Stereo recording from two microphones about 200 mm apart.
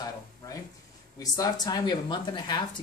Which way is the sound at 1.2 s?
20° left (ahead or behind).